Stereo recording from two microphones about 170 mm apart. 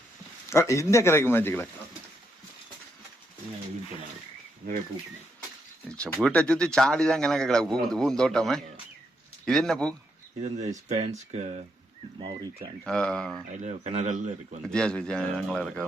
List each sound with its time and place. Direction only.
0.5 s speech: 15° left (ahead or behind)
5.9 s speech: 5° left (ahead or behind)
10.8 s speech: 40° right (ahead or behind)
12.8 s speech: 5° left (ahead or behind)
13.6 s speech: 40° right (ahead or behind)
14.6 s speech: 5° left (ahead or behind)